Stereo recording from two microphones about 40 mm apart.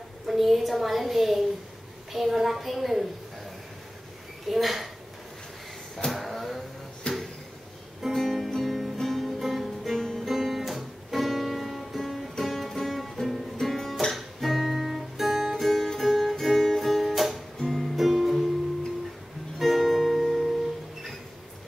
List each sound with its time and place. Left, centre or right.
0.3 s a woman's voice: centre
4.5 s a woman's voice: centre
6.1 s vehicle: centre
7.0 s a sound: left
8.1 s music: centre
9.9 s music: centre
10.2 s music: centre
12.4 s music: centre
13.6 s guitar: centre
15.5 s music: centre
17.6 s music: centre
17.9 s music: centre
19.6 s music: centre